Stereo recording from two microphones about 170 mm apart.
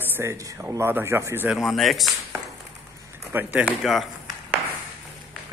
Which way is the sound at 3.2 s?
10° right (ahead or behind).